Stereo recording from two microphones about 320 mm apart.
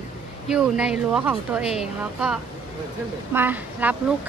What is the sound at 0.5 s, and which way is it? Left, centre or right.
A woman's voice, centre.